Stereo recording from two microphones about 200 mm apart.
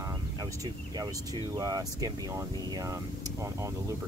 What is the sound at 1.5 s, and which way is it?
Speech, 20° right (ahead or behind).